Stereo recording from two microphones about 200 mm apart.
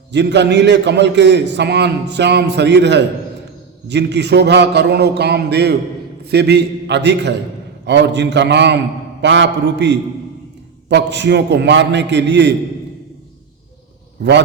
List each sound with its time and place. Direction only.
0.1 s a man's voice: 60° right (ahead or behind)